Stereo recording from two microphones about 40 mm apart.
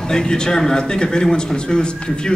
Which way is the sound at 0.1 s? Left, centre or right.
Centre.